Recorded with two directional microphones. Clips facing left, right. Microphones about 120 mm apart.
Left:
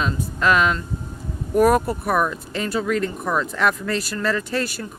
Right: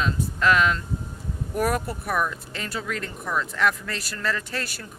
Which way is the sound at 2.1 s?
60° left (ahead or behind).